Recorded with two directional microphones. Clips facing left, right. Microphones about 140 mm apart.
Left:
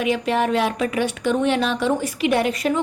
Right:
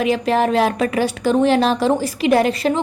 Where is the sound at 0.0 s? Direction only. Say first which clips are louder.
Right 3 dB; 40° right (ahead or behind).